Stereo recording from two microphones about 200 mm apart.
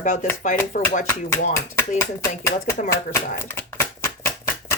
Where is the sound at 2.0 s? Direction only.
15° left (ahead or behind).